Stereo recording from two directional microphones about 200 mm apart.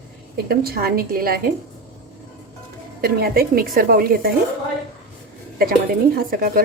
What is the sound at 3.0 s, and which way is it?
A woman's voice, 50° right (ahead or behind).